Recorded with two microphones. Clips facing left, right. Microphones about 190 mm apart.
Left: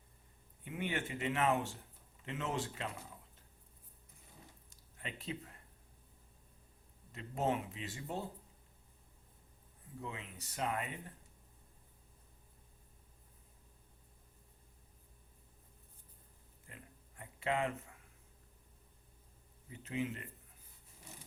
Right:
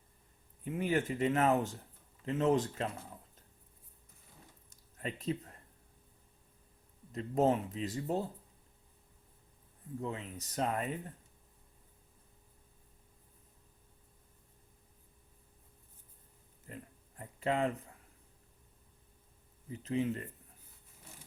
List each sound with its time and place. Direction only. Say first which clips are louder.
0.6 s speech: right 7 dB; 40° right (ahead or behind)
4.7 s a sound: right 7 dB; 40° right (ahead or behind)
7.1 s speech: right 7 dB; 40° right (ahead or behind)
10.0 s speech: right 6 dB; 40° right (ahead or behind)
16.6 s a sound: right 8 dB; 40° right (ahead or behind)
19.7 s speech: right 6 dB; 35° right (ahead or behind)